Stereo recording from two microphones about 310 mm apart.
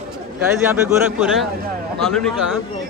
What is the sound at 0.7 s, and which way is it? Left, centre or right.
A man's voice, centre.